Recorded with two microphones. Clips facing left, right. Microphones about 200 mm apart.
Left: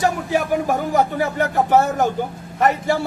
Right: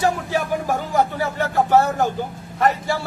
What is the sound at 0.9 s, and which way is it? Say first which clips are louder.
Speech: left 1 dB; 20° left (ahead or behind).